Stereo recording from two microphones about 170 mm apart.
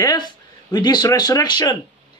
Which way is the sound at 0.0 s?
25° left (ahead or behind).